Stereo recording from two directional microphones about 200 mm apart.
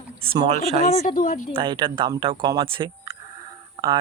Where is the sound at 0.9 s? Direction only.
30° left (ahead or behind).